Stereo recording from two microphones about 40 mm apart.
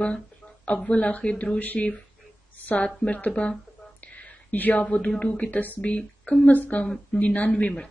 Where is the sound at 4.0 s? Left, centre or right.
Left.